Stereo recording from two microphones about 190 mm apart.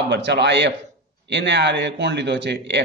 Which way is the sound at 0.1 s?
65° right (ahead or behind).